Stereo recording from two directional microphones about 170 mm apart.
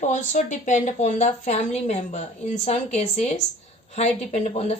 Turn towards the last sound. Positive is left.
turn(degrees=40)  # may be behind; listen again after turning